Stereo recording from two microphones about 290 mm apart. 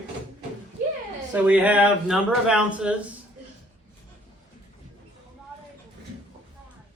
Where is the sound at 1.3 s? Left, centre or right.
Centre.